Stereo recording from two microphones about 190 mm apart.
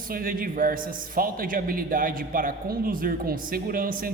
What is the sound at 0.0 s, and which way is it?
A man's voice, 50° right (ahead or behind).